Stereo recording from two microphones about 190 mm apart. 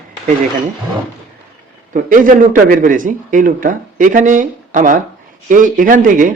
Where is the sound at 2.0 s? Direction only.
45° right (ahead or behind).